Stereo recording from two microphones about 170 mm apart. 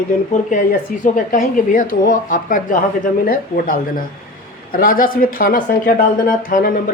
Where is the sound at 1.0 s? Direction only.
50° left (ahead or behind).